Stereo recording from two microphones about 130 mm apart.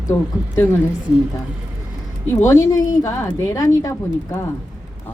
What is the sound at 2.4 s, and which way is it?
A woman's voice, 25° left (ahead or behind).